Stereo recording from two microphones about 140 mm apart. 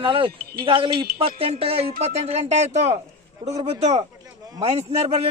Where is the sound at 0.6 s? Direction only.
35° right (ahead or behind).